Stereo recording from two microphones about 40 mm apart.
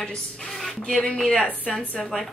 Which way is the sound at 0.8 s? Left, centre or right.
Left.